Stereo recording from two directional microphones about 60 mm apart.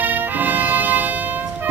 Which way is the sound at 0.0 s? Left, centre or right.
Right.